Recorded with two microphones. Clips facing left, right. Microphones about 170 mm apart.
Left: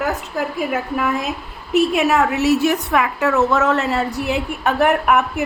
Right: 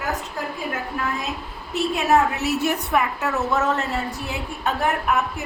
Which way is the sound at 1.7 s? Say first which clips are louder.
Left 4 dB; 90° left.